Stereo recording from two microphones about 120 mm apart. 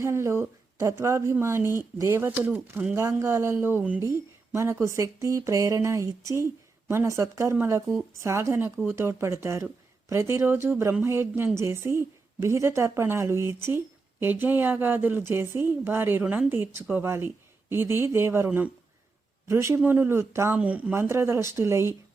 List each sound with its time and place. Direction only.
0.0 s a woman's voice: 20° right (ahead or behind)
20.9 s a woman's voice: 20° right (ahead or behind)